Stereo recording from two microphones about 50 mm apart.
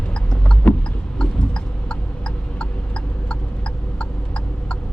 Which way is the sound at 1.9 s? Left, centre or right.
Left.